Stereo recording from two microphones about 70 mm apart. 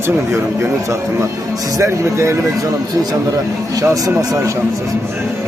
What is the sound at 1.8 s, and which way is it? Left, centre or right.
Speech, right.